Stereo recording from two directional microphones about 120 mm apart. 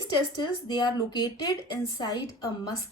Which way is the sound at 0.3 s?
40° left (ahead or behind).